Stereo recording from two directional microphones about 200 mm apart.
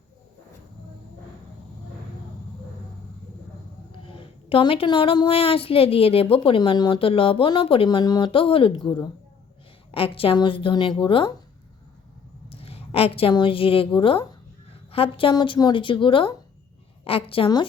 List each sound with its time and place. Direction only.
4.0 s a woman's voice: 25° left (ahead or behind)
12.5 s a woman's voice: 30° left (ahead or behind)